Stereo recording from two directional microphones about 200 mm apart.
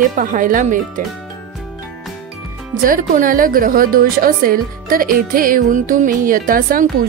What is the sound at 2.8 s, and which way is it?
Speech, 45° right (ahead or behind).